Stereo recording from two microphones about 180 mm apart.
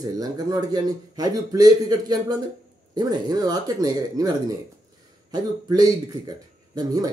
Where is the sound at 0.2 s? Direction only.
20° right (ahead or behind).